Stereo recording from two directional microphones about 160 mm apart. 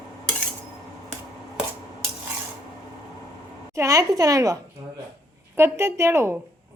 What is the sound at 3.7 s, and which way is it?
A woman's voice, 20° right (ahead or behind).